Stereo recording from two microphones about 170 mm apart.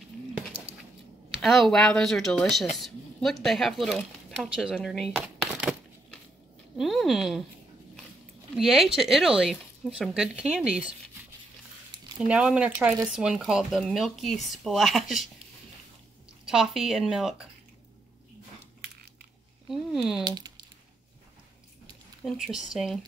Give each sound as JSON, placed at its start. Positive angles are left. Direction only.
{"t": 1.4, "sound": "speech", "side_deg": 0}
{"t": 8.5, "sound": "speech", "side_deg": 0}
{"t": 12.2, "sound": "speech", "side_deg": -5}
{"t": 16.4, "sound": "speech", "side_deg": -5}
{"t": 19.7, "sound": "speech", "side_deg": 0}
{"t": 20.2, "sound": "speech", "side_deg": -25}
{"t": 22.2, "sound": "speech", "side_deg": -5}